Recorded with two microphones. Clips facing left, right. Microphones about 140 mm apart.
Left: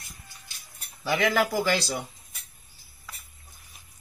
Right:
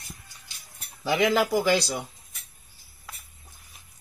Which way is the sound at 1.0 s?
15° right (ahead or behind).